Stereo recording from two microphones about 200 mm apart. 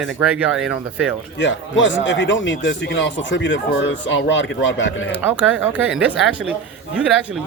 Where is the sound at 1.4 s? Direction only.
65° left (ahead or behind).